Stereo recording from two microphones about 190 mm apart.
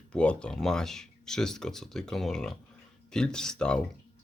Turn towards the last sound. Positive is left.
turn(degrees=5)  # may be behind; listen again after turning